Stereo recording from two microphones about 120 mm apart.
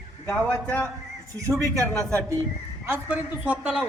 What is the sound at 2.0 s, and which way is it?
Speech, 25° right (ahead or behind).